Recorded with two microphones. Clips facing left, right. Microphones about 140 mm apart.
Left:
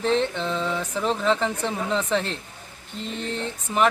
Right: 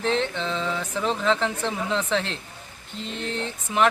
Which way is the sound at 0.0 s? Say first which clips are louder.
Left 2 dB; 5° left (ahead or behind).